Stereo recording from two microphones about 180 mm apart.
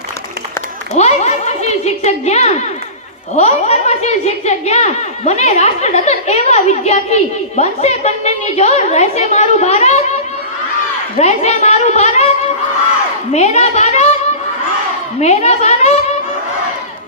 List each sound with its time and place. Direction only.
0.9 s a woman's voice: 40° left (ahead or behind)
11.2 s a woman's voice: 40° left (ahead or behind)
13.3 s speech: 40° left (ahead or behind)
15.2 s speech: 40° left (ahead or behind)